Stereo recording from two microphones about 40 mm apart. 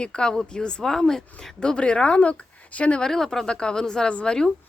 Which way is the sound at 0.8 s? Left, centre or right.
Centre.